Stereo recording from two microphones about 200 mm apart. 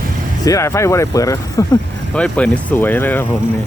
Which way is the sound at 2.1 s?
5° left (ahead or behind).